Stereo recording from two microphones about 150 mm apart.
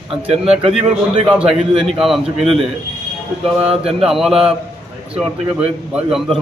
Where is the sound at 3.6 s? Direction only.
40° right (ahead or behind).